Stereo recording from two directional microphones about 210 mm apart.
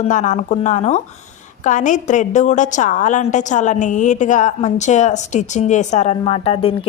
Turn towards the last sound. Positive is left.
turn(degrees=25)  # may be behind; listen again after turning